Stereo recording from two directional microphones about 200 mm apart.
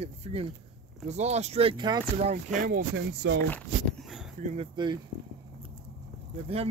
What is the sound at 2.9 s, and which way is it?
Speech, 60° right (ahead or behind).